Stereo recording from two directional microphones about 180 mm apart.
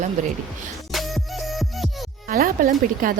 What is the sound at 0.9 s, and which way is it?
Music, centre (ahead or behind).